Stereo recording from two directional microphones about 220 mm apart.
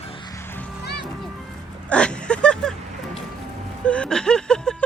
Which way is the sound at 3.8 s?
5° left (ahead or behind).